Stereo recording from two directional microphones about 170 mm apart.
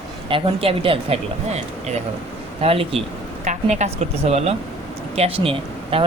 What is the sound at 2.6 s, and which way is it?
Speech, 35° right (ahead or behind).